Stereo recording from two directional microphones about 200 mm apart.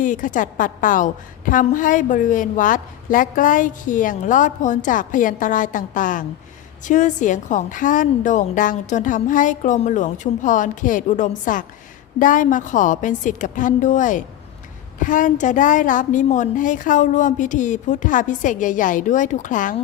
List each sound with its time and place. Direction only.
0.0 s a woman's voice: 40° left (ahead or behind)